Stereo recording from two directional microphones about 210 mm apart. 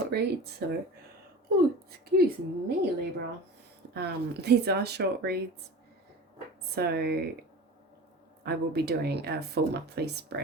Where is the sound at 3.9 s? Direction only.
50° right (ahead or behind).